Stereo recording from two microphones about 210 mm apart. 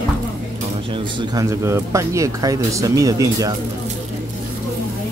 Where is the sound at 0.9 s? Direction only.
20° right (ahead or behind).